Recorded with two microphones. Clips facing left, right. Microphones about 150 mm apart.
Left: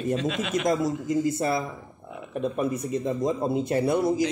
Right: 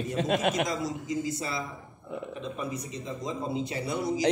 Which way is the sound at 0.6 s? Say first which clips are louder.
Left 6 dB; 55° left (ahead or behind).